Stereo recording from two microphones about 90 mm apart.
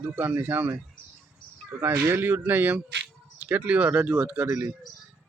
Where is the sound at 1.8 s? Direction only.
25° right (ahead or behind).